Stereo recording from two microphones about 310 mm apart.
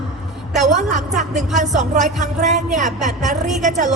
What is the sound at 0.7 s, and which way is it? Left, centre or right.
A woman's voice, right.